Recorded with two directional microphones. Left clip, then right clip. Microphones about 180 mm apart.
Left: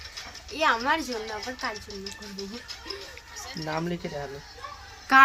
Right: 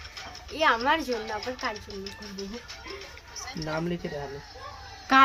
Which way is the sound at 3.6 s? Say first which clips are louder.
Left 1 dB; centre (ahead or behind).